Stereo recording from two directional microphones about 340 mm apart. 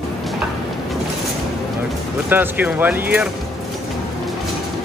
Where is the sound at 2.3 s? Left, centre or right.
Centre.